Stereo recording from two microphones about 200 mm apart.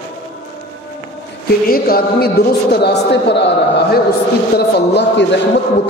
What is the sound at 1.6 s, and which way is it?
A man's voice, 50° left (ahead or behind).